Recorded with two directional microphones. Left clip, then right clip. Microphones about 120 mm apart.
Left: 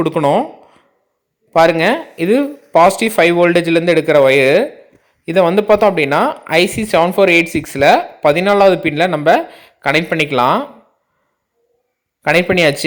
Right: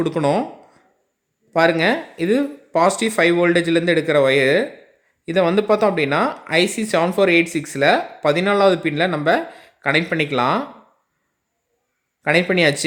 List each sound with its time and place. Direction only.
0.0 s speech: 15° left (ahead or behind)
12.2 s speech: 20° left (ahead or behind)